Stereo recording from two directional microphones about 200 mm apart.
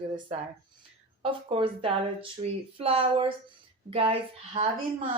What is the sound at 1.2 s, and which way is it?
Speech, 25° right (ahead or behind).